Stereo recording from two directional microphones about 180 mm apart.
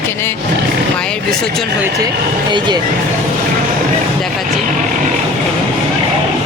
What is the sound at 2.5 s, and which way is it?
Speech, 25° right (ahead or behind).